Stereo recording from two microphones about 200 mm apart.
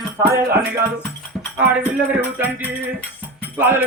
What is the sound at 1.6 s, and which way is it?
Music, 10° right (ahead or behind).